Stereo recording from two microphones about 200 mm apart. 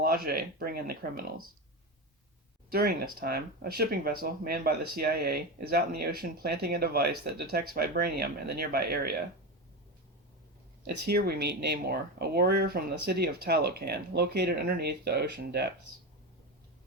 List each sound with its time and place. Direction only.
0.0 s speech: 50° right (ahead or behind)
2.6 s speech: 50° right (ahead or behind)
10.8 s speech: 55° right (ahead or behind)